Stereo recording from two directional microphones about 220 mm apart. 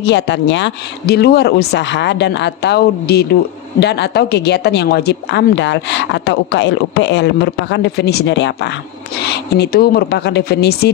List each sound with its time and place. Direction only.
0.0 s speech: 55° left (ahead or behind)